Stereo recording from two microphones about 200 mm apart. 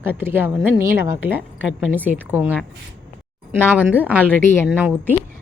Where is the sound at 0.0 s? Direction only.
10° right (ahead or behind).